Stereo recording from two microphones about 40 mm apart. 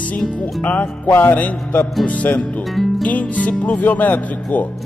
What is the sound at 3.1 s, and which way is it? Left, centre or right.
Speech, left.